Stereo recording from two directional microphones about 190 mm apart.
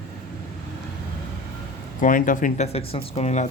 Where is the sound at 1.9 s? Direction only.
45° left (ahead or behind).